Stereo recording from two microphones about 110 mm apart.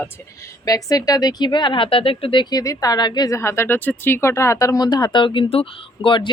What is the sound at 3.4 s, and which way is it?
A woman's voice, 25° left (ahead or behind).